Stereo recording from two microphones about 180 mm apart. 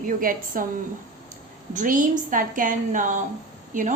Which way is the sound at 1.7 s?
45° right (ahead or behind).